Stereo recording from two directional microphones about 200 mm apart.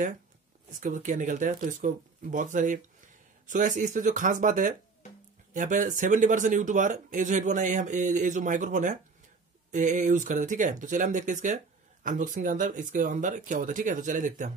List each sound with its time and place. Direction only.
0.7 s speech: 40° right (ahead or behind)